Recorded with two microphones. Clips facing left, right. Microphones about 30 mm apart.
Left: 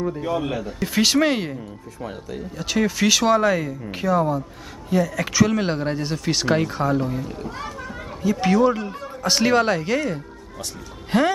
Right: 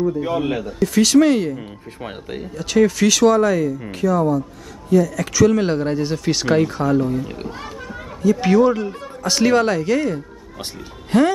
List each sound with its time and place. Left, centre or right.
0.2 s a man's voice: centre
0.8 s speech: centre
2.5 s speech: centre
8.4 s speech: centre